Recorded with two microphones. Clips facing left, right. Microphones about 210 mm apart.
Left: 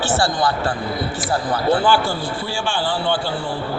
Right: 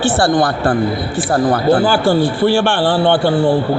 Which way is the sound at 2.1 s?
65° right (ahead or behind).